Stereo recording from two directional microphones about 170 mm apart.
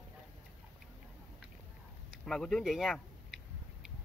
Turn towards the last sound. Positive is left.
turn(degrees=0)  # may be behind; listen again after turning